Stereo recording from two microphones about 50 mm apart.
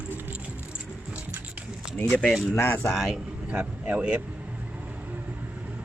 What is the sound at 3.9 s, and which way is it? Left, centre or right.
Speech, right.